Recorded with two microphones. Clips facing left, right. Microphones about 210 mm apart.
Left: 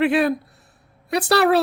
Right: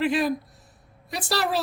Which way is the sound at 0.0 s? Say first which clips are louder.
Left 5 dB; 65° left (ahead or behind).